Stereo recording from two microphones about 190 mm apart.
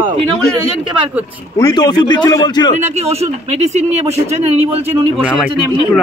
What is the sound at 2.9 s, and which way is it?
Speech, 35° right (ahead or behind).